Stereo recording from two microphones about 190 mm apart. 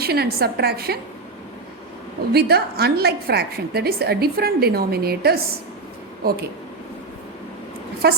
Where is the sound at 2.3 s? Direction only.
55° right (ahead or behind).